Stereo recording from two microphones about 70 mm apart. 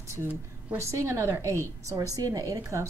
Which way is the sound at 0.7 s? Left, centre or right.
Right.